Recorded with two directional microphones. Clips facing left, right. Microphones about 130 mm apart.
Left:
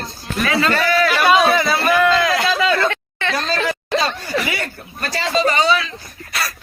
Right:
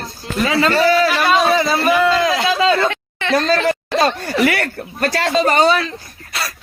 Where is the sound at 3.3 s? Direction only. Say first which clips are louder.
Right 7 dB; 50° right (ahead or behind).